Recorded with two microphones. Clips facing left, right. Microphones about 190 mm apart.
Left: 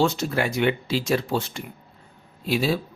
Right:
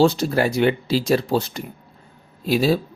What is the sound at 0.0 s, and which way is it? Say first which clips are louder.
A man's voice: right 5 dB; 35° right (ahead or behind).